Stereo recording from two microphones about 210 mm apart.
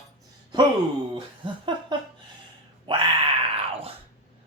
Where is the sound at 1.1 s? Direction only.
20° right (ahead or behind).